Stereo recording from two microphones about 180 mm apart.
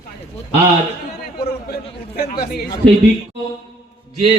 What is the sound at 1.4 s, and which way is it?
A man's voice, 60° left (ahead or behind).